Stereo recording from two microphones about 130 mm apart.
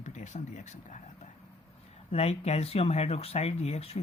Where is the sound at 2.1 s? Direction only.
55° left (ahead or behind).